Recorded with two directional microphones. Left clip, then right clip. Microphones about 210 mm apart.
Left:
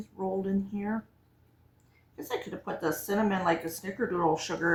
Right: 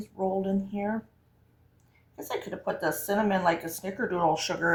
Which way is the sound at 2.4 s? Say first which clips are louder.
Right 5 dB; 35° right (ahead or behind).